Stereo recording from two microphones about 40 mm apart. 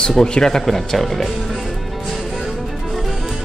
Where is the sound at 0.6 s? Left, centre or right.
Centre.